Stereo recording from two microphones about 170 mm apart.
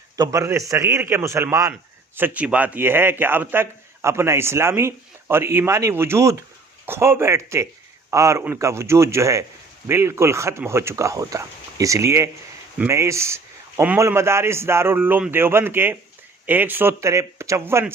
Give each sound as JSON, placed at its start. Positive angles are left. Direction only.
{"t": 0.2, "sound": "a man's voice", "side_deg": -20}